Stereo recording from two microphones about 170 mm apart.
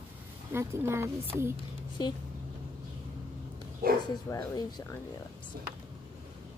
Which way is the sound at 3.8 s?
60° right (ahead or behind).